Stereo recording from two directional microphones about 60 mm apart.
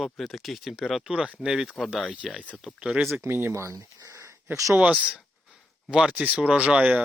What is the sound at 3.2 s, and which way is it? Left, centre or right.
Speech, right.